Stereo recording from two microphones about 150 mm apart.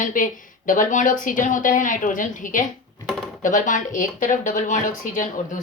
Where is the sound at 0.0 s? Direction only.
65° left (ahead or behind).